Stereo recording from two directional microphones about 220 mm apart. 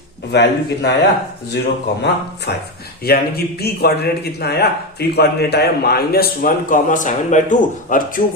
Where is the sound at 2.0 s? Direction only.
50° left (ahead or behind).